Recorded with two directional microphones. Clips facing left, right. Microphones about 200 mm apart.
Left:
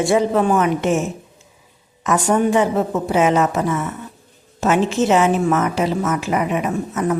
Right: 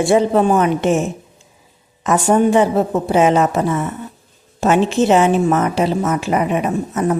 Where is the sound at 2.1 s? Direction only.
30° right (ahead or behind).